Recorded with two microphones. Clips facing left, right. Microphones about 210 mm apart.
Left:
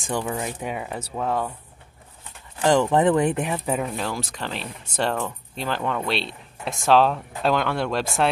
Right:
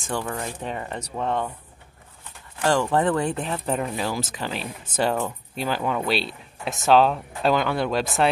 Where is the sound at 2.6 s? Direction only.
20° left (ahead or behind).